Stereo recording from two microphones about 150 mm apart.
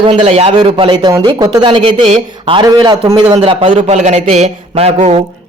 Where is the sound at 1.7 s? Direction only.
45° right (ahead or behind).